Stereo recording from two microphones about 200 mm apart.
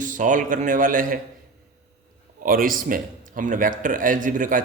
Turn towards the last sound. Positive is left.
turn(degrees=-40)  # may be behind; listen again after turning